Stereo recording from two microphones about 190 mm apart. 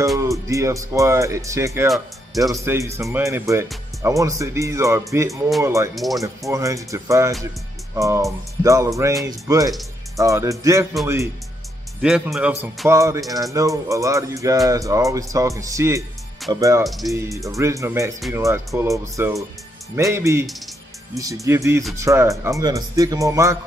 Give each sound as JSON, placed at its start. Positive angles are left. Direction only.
{"t": 0.2, "sound": "speech", "side_deg": -15}
{"t": 1.9, "sound": "speech", "side_deg": 0}
{"t": 2.5, "sound": "speech", "side_deg": -15}
{"t": 5.9, "sound": "speech", "side_deg": 0}
{"t": 6.5, "sound": "speech", "side_deg": -15}
{"t": 12.0, "sound": "speech", "side_deg": -5}
{"t": 16.8, "sound": "speech", "side_deg": 0}
{"t": 17.6, "sound": "speech", "side_deg": -15}